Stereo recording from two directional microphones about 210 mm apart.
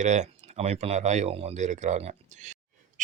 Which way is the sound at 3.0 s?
35° right (ahead or behind).